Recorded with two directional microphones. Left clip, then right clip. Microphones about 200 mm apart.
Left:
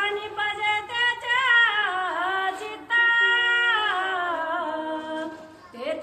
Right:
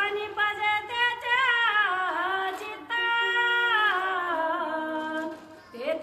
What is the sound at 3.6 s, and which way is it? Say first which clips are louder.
Music: left 1 dB; 15° right (ahead or behind).